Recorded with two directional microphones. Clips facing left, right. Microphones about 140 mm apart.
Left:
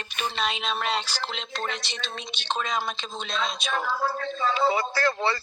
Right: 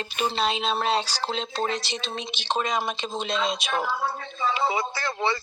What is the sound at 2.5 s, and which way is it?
Speech, 15° right (ahead or behind).